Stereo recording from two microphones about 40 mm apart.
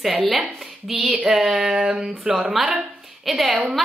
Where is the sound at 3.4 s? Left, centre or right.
Right.